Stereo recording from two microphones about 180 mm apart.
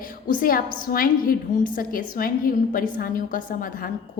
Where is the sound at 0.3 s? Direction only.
50° left (ahead or behind).